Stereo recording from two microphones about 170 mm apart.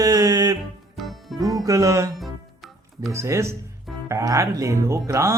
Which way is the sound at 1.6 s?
20° right (ahead or behind).